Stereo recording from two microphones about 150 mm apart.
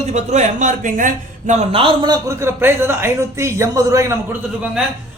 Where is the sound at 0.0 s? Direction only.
50° right (ahead or behind).